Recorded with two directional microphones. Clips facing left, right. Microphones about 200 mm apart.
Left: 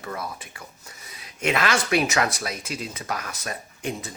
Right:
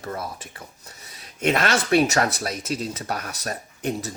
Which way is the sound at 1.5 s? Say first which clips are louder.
Right 2 dB; 40° right (ahead or behind).